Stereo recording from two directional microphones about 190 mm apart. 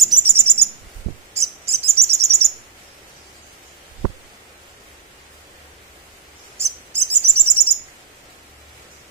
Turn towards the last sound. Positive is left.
turn(degrees=-10)  # may be behind; listen again after turning